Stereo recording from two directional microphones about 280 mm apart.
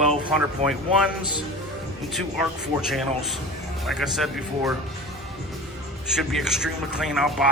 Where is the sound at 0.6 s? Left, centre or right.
Right.